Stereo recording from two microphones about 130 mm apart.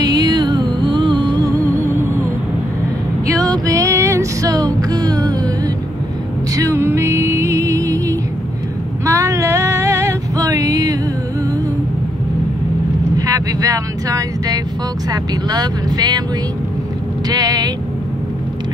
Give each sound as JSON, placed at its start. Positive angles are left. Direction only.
{"t": 0.0, "sound": "music", "side_deg": -30}
{"t": 3.3, "sound": "music", "side_deg": -25}
{"t": 6.5, "sound": "music", "side_deg": -25}
{"t": 9.0, "sound": "female singing", "side_deg": -25}
{"t": 13.2, "sound": "vehicle", "side_deg": -25}
{"t": 15.0, "sound": "speech", "side_deg": -30}
{"t": 17.3, "sound": "vehicle", "side_deg": -30}